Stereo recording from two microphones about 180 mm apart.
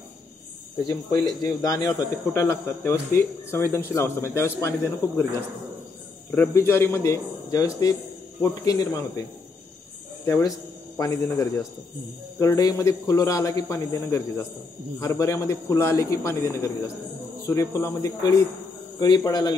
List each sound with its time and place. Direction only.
0.8 s speech: 20° left (ahead or behind)
6.3 s speech: 10° left (ahead or behind)
8.4 s cricket: 20° left (ahead or behind)
10.2 s speech: 20° left (ahead or behind)
11.0 s cricket: 20° left (ahead or behind)
12.4 s speech: 20° left (ahead or behind)
18.9 s cricket: 20° left (ahead or behind)